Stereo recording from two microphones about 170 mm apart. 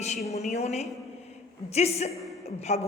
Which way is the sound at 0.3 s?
40° left (ahead or behind).